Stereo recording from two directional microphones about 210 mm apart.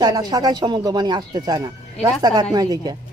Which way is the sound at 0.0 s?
20° right (ahead or behind).